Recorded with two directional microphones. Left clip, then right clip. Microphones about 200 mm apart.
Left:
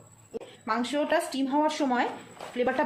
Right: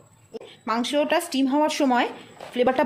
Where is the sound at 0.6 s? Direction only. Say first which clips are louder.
Right 5 dB; 50° right (ahead or behind).